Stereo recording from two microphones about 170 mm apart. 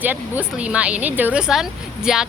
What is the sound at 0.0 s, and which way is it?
Speech, 10° right (ahead or behind).